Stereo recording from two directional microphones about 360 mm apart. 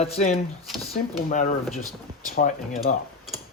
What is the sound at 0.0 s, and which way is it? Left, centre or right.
Speech, centre.